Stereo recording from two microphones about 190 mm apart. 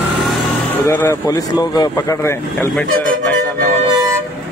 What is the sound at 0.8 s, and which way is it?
Speech, 15° left (ahead or behind).